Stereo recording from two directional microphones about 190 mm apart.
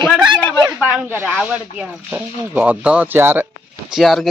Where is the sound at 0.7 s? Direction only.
10° right (ahead or behind).